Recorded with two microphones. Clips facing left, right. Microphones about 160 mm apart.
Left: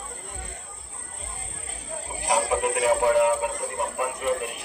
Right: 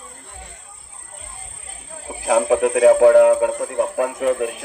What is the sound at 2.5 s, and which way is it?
Speech, 90° right.